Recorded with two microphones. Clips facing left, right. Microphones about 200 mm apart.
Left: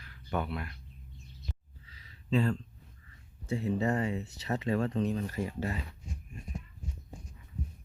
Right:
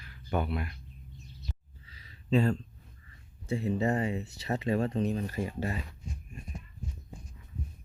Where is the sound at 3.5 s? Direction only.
10° right (ahead or behind).